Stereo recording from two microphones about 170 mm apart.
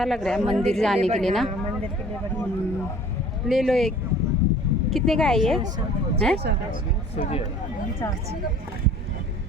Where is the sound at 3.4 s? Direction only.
Centre (ahead or behind).